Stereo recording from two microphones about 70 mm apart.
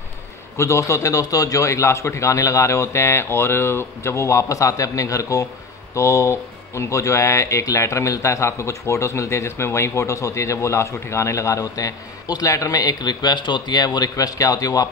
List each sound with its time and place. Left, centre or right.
0.6 s speech: left
13.9 s speech: left